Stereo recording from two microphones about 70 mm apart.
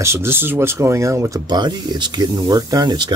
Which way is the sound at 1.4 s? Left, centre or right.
Right.